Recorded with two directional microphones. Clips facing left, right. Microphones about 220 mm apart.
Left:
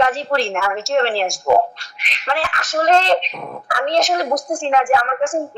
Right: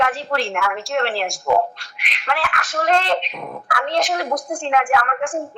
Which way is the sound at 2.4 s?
45° left (ahead or behind).